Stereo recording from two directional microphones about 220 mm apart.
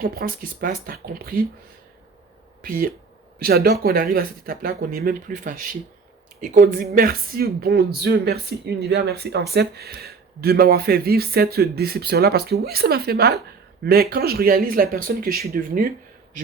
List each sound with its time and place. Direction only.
0.0 s speech: 40° right (ahead or behind)
2.6 s speech: 40° right (ahead or behind)